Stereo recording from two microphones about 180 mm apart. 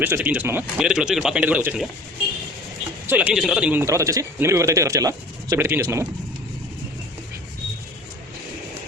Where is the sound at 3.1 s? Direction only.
10° right (ahead or behind).